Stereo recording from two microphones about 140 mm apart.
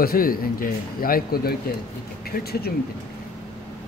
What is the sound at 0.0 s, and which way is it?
A man's voice, 90° left.